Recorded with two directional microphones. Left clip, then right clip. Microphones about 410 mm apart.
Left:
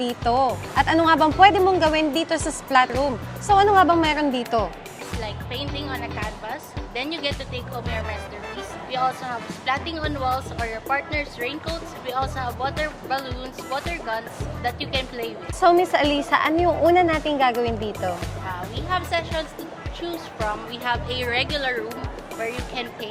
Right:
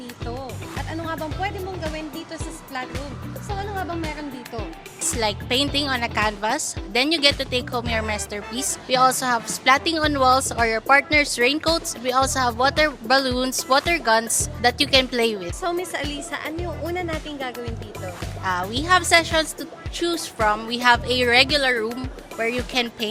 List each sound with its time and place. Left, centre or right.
0.3 s speech: centre
5.2 s a woman's voice: right
15.6 s a woman's voice: centre
18.4 s a woman's voice: right